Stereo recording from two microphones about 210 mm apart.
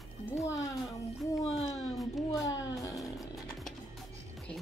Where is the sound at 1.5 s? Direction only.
30° left (ahead or behind).